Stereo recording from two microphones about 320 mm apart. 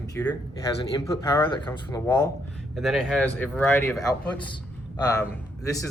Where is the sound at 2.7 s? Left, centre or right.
Centre.